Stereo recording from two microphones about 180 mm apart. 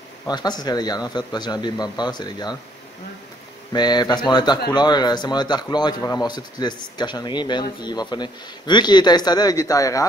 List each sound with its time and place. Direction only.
0.3 s a man's voice: 20° left (ahead or behind)
3.7 s a man's voice: 25° left (ahead or behind)